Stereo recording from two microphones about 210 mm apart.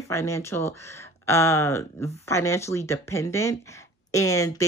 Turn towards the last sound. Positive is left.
turn(degrees=15)  # may be behind; listen again after turning